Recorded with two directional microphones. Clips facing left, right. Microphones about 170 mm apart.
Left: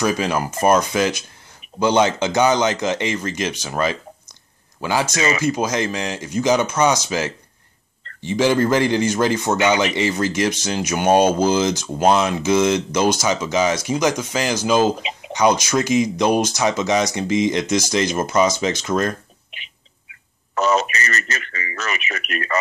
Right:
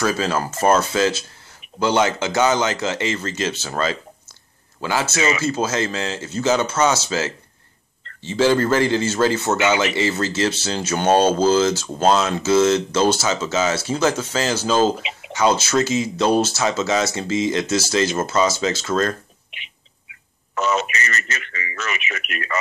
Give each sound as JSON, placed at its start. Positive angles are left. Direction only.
{"t": 0.0, "sound": "a man's voice", "side_deg": 15}
{"t": 15.0, "sound": "a sound", "side_deg": 40}
{"t": 15.3, "sound": "a man's voice", "side_deg": 15}
{"t": 20.5, "sound": "a man's voice", "side_deg": 40}